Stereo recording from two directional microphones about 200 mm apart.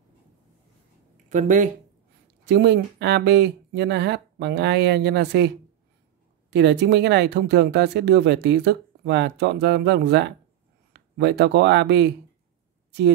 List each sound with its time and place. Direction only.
1.3 s speech: 40° right (ahead or behind)
2.4 s speech: 60° right (ahead or behind)
6.5 s speech: 60° right (ahead or behind)